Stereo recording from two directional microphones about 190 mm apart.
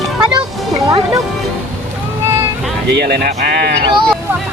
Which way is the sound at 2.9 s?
55° right (ahead or behind).